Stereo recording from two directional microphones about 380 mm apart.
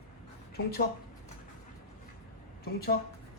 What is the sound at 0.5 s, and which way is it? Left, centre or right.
Speech, left.